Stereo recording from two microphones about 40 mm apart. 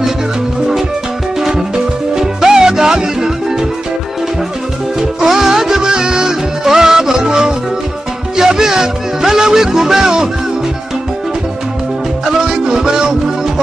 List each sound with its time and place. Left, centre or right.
2.1 s music: centre
5.2 s music: centre
12.3 s music: centre